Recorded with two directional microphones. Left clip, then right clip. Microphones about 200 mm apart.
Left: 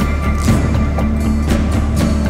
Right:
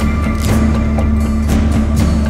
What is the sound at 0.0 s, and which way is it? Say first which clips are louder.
Music: right 1 dB; centre (ahead or behind).